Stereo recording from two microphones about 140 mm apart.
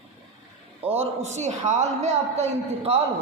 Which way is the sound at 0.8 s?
45° right (ahead or behind).